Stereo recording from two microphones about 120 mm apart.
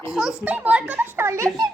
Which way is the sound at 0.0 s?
5° right (ahead or behind).